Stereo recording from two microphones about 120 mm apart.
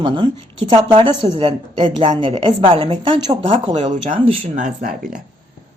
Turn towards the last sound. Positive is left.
turn(degrees=-90)